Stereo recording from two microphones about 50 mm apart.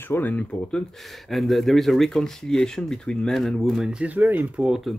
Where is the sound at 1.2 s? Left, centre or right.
Centre.